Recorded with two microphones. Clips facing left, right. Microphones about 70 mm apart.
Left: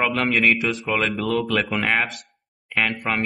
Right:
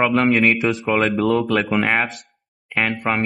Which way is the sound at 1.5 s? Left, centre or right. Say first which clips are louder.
Right 3 dB; centre.